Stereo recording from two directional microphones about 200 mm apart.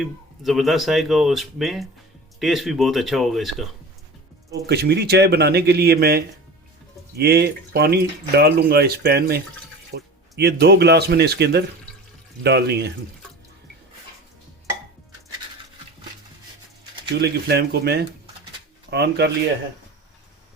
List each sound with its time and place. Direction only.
0.0 s speech: centre (ahead or behind)
4.6 s speech: 55° right (ahead or behind)
17.2 s speech: 55° right (ahead or behind)